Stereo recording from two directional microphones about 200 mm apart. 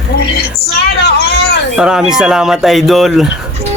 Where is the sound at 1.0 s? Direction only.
55° left (ahead or behind).